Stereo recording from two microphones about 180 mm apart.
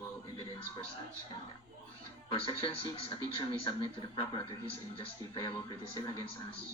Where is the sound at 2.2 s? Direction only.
30° left (ahead or behind).